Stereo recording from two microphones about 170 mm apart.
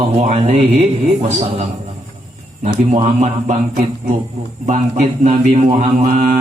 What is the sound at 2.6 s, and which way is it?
Speech, 40° right (ahead or behind).